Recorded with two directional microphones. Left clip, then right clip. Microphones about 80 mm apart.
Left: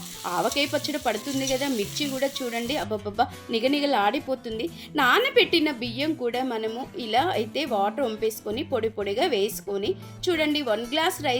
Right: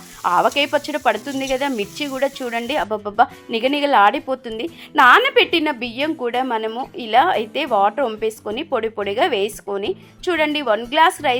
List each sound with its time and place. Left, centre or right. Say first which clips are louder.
0.2 s sizzle: right 9 dB; left
6.2 s a woman's voice: right 6 dB; left
8.4 s sizzle: right 5 dB; left